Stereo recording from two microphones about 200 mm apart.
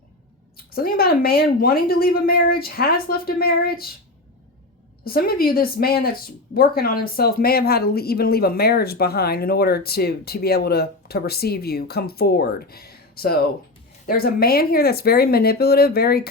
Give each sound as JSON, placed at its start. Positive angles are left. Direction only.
{"t": 0.5, "sound": "speech", "side_deg": 50}
{"t": 5.0, "sound": "speech", "side_deg": 50}